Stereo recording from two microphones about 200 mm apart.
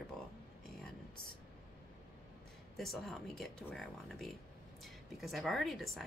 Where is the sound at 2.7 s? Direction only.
Centre (ahead or behind).